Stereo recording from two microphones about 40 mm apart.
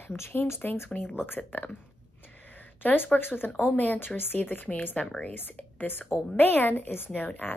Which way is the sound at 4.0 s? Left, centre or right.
Left.